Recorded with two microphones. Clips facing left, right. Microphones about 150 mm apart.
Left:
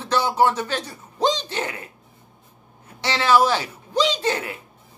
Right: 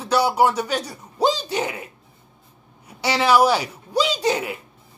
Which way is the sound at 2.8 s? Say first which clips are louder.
Right 2 dB; 15° right (ahead or behind).